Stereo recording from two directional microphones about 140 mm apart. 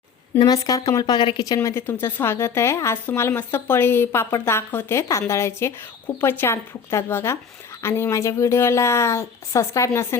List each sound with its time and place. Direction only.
0.3 s speech: 30° left (ahead or behind)